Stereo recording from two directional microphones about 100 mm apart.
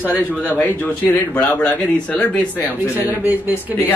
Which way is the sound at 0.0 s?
15° right (ahead or behind).